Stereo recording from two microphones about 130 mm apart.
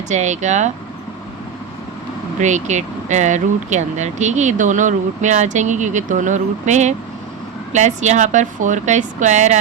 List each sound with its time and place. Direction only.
0.1 s speech: 65° right (ahead or behind)
2.4 s speech: 65° right (ahead or behind)